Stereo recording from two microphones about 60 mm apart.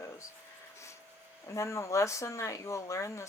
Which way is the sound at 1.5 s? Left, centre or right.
Left.